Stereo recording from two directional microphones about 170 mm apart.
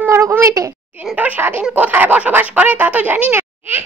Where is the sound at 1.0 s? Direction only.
10° right (ahead or behind).